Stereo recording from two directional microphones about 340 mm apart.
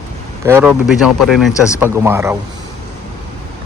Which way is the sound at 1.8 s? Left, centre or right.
Centre.